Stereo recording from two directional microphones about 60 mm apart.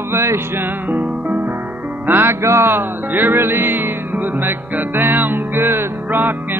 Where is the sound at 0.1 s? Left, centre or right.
Right.